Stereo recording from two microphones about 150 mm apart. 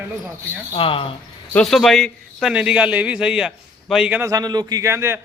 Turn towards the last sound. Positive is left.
turn(degrees=-15)  # may be behind; listen again after turning